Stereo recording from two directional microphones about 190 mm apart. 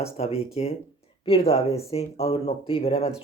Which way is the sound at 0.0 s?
35° left (ahead or behind).